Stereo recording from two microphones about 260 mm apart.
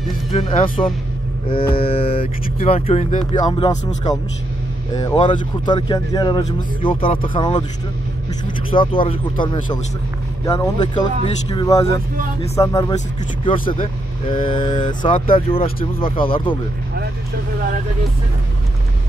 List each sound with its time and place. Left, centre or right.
0.3 s speech: left
1.6 s mantra: left
1.9 s speech: left
8.7 s speech: centre